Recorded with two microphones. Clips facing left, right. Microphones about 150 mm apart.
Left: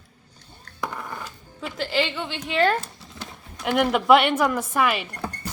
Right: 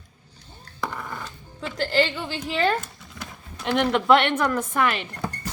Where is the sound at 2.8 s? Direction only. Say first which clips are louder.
Even; 30° left (ahead or behind).